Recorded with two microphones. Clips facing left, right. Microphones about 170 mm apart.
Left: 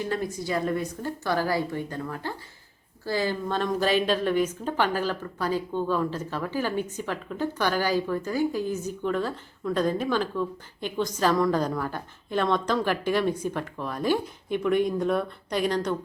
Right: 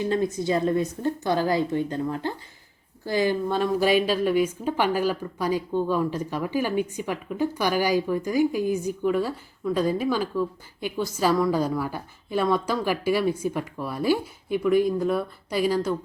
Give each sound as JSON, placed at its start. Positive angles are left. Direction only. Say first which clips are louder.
{"t": 0.0, "sound": "a woman's voice", "louder": "right 5 dB", "side_deg": -20}